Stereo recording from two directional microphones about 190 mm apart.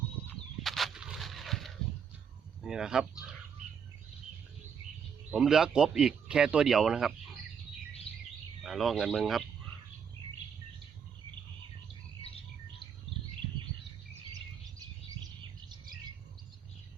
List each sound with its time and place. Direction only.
0.6 s a sound: centre (ahead or behind)
2.6 s speech: 5° right (ahead or behind)
5.3 s speech: centre (ahead or behind)
8.1 s music: 30° left (ahead or behind)
8.6 s speech: centre (ahead or behind)